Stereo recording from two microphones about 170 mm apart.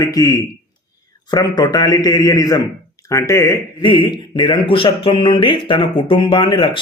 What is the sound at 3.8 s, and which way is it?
Speech, 30° left (ahead or behind).